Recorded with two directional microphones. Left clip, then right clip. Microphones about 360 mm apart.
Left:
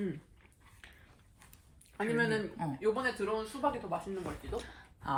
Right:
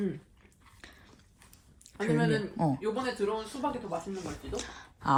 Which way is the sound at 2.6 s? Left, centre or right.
Centre.